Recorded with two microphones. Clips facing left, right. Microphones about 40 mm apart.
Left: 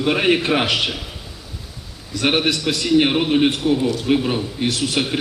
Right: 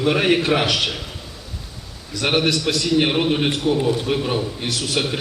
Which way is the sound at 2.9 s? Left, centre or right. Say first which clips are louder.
Left 3 dB; centre.